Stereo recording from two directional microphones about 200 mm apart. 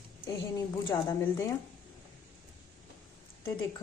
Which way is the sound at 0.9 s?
15° left (ahead or behind).